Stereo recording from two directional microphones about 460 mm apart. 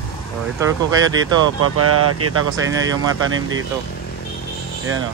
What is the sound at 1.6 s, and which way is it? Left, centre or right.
Speech, right.